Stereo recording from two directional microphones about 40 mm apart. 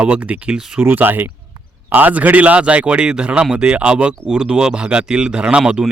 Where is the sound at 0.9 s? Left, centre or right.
Right.